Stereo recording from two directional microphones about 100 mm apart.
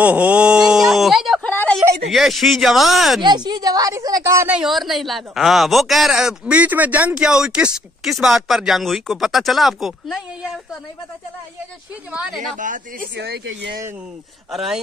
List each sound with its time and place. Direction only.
0.0 s speech: 15° right (ahead or behind)
1.4 s a sound: 15° left (ahead or behind)
2.0 s speech: centre (ahead or behind)
3.2 s a woman's voice: 50° right (ahead or behind); by 4.5 s 30° right (ahead or behind)
4.6 s speech: centre (ahead or behind)
12.1 s speech: 10° right (ahead or behind)
14.5 s speech: centre (ahead or behind)